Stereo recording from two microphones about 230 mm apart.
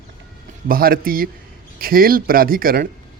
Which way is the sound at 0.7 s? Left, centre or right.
Right.